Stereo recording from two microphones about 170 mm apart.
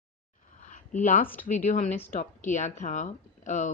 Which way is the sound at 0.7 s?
45° left (ahead or behind).